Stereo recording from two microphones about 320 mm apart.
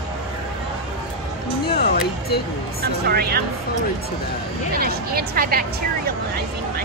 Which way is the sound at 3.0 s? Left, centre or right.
Right.